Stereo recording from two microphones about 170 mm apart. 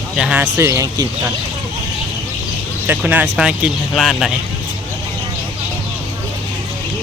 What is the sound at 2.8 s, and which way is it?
Speech, 10° right (ahead or behind).